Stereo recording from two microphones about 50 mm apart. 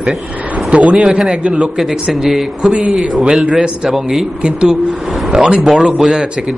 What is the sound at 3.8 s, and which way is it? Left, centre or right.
Speech, centre.